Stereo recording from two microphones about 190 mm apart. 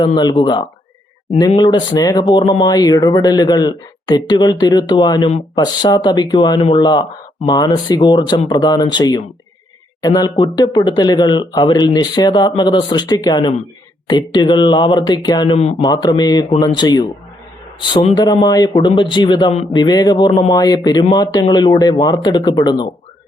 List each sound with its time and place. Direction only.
0.0 s speech: 25° left (ahead or behind)
15.5 s a man's voice: 35° left (ahead or behind)
15.9 s speech: 20° left (ahead or behind)